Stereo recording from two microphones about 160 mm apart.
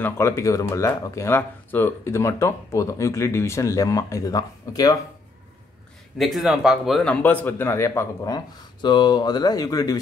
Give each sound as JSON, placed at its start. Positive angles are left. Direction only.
{"t": 0.0, "sound": "speech", "side_deg": 20}
{"t": 6.1, "sound": "speech", "side_deg": 0}